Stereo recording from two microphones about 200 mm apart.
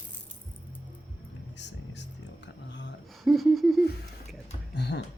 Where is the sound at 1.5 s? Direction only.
60° left (ahead or behind).